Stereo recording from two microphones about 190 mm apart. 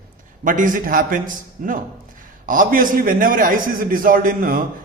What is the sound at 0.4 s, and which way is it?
A man's voice, 45° right (ahead or behind).